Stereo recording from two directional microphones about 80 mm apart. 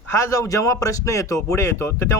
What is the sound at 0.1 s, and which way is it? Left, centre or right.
Speech, left.